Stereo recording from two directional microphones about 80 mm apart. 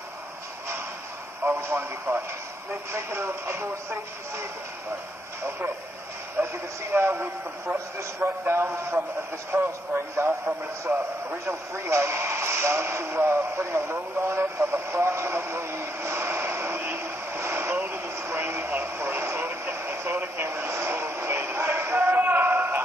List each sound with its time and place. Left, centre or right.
1.4 s speech: right
6.4 s a man's voice: right
10.1 s a man's voice: right
11.7 s radio: right